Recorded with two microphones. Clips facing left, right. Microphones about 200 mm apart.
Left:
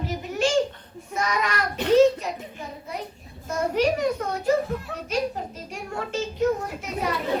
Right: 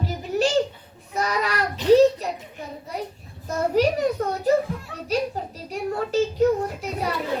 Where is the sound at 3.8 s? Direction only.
35° right (ahead or behind).